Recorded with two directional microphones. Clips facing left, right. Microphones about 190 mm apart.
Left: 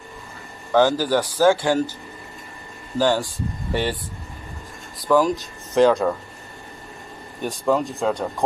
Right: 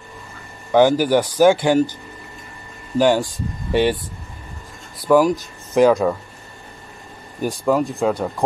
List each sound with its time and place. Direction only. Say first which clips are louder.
0.7 s speech: right 3 dB; 15° right (ahead or behind)
3.0 s speech: right 4 dB; 15° right (ahead or behind)
5.0 s speech: right 3 dB; 10° right (ahead or behind)
7.4 s speech: right 3 dB; centre (ahead or behind)